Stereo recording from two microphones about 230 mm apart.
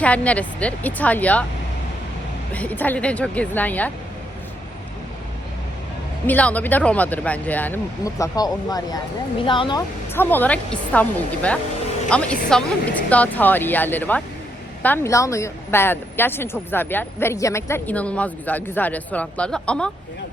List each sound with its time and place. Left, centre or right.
0.0 s speech: centre
2.5 s speech: centre
6.2 s speech: centre
10.2 s speech: centre
12.0 s a woman's voice: centre